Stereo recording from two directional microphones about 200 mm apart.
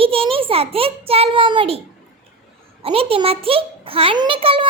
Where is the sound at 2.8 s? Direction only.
30° right (ahead or behind).